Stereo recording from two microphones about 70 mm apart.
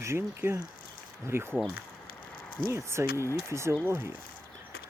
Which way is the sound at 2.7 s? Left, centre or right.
Right.